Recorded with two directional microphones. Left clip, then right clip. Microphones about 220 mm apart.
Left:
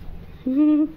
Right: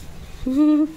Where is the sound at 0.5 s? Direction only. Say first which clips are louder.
Right 1 dB; 15° right (ahead or behind).